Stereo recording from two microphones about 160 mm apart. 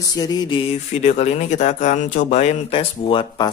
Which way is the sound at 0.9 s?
45° left (ahead or behind).